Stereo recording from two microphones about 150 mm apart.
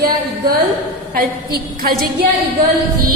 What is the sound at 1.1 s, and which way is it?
Speech, 80° right.